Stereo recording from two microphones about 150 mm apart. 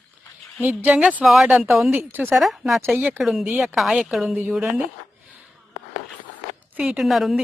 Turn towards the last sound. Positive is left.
turn(degrees=0)  # may be behind; listen again after turning